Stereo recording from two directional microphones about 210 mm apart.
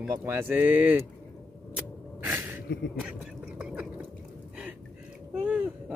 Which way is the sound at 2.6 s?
55° left (ahead or behind).